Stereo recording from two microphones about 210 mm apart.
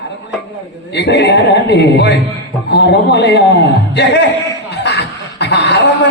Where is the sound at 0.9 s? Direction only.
55° left (ahead or behind).